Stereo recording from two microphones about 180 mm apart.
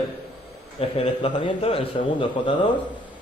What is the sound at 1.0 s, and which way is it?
A man's voice, 30° left (ahead or behind).